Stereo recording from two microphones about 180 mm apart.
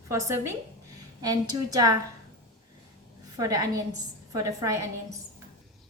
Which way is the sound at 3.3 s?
20° right (ahead or behind).